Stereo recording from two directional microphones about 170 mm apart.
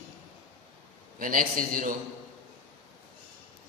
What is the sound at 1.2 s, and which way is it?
Speech, 55° right (ahead or behind).